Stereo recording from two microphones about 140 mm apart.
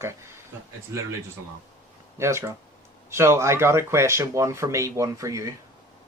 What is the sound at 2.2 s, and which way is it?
Speech, 20° right (ahead or behind).